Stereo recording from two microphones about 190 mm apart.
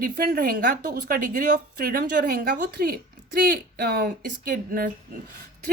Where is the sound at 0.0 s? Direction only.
50° right (ahead or behind).